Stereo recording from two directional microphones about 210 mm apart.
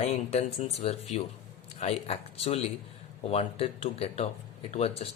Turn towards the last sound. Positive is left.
turn(degrees=30)  # may be behind; listen again after turning